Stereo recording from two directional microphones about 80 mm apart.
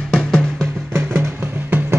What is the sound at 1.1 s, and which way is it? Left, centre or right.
Music, right.